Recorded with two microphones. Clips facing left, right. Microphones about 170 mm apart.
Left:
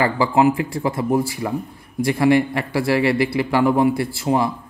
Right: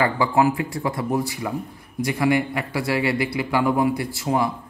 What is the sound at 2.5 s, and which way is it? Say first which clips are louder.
A man's voice: left 4 dB; 30° left (ahead or behind).